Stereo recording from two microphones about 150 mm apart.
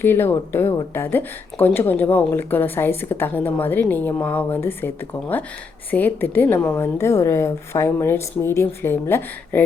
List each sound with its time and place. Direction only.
0.0 s a woman's voice: 15° left (ahead or behind)
5.9 s a woman's voice: 15° left (ahead or behind)